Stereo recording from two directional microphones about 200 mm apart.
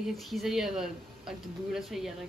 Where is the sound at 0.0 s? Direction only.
Centre (ahead or behind).